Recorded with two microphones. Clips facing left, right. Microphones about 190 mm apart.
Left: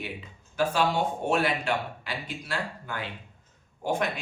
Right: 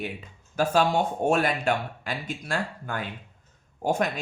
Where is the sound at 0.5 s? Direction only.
45° right (ahead or behind).